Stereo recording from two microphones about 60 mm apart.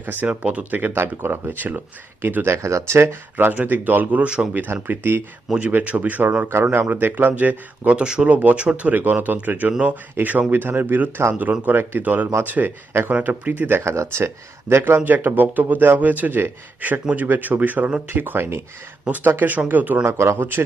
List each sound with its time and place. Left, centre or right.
0.0 s speech: right
0.9 s speech: right
3.3 s speech: right
5.5 s speech: right
13.1 s speech: right
13.5 s speech: right
13.9 s speech: right
20.1 s speech: right
20.4 s speech: right